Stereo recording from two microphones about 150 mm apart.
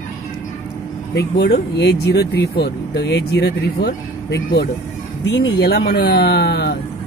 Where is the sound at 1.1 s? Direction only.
90° left.